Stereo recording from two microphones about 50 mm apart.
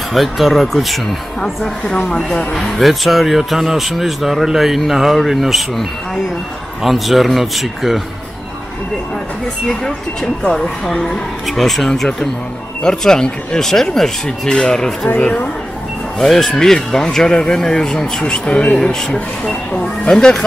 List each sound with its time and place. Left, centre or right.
0.1 s speech: centre
1.4 s speech: centre
9.7 s speech: centre
11.4 s speech: centre
16.2 s speech: centre